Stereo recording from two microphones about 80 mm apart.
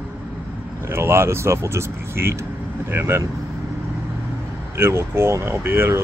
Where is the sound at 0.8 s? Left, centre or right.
Right.